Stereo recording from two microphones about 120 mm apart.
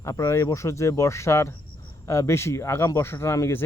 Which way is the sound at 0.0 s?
25° left (ahead or behind).